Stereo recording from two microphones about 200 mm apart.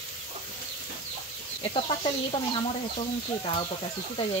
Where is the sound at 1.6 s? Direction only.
25° left (ahead or behind).